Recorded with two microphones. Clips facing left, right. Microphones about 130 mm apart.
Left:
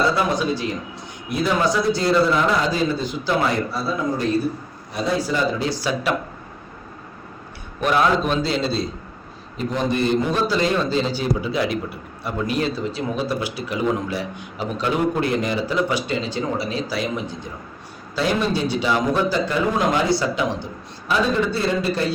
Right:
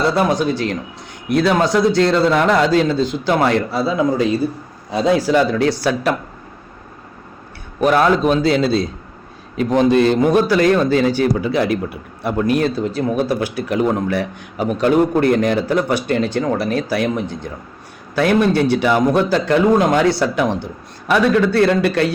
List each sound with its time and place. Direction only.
0.3 s a man's voice: 70° right (ahead or behind)
7.8 s a man's voice: 45° right (ahead or behind)
9.6 s a man's voice: 90° right
10.2 s a man's voice: 55° right (ahead or behind)
21.1 s a man's voice: 70° right (ahead or behind)